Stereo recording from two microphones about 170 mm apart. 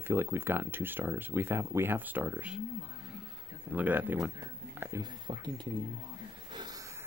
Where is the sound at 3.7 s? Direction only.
10° right (ahead or behind).